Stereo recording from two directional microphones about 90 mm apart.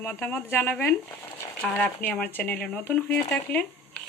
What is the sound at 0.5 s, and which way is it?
Frying, 15° left (ahead or behind).